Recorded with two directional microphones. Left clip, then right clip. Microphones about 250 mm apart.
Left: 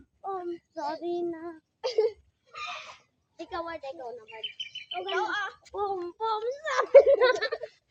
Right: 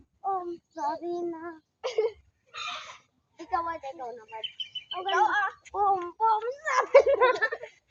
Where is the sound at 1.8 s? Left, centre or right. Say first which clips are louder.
Left 2 dB; left.